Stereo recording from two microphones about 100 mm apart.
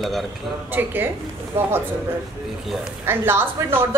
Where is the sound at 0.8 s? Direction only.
20° right (ahead or behind).